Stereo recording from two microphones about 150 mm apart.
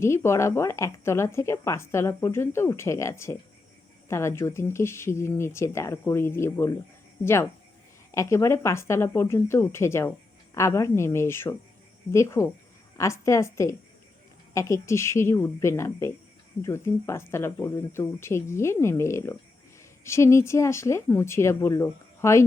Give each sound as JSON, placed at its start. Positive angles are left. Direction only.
{"t": 0.0, "sound": "speech", "side_deg": 15}
{"t": 8.1, "sound": "speech", "side_deg": 20}